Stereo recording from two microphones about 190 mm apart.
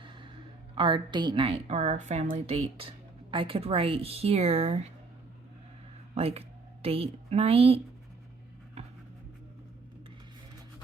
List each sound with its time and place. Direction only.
0.0 s a sound: 25° right (ahead or behind)
0.8 s a woman's voice: 25° right (ahead or behind)
6.1 s a woman's voice: 30° right (ahead or behind)